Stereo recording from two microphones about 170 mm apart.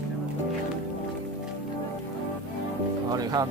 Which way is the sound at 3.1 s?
20° right (ahead or behind).